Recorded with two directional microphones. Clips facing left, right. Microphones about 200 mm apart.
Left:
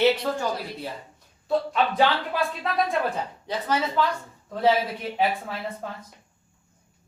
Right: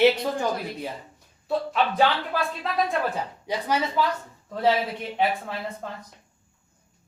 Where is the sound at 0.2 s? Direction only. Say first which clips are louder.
Right 1 dB; 15° right (ahead or behind).